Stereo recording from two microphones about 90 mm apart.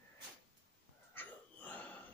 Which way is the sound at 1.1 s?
20° left (ahead or behind).